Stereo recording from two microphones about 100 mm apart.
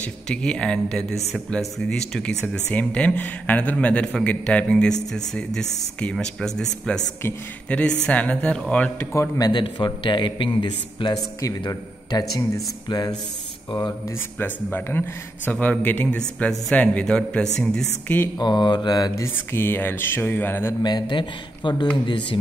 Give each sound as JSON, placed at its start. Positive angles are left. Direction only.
{"t": 0.0, "sound": "speech", "side_deg": 10}
{"t": 9.1, "sound": "speech", "side_deg": 30}
{"t": 9.5, "sound": "a man's voice", "side_deg": 50}
{"t": 11.6, "sound": "a man's voice", "side_deg": 40}
{"t": 14.4, "sound": "speech", "side_deg": 20}
{"t": 18.4, "sound": "a man's voice", "side_deg": 50}
{"t": 19.1, "sound": "speech", "side_deg": 25}
{"t": 20.8, "sound": "a man's voice", "side_deg": 50}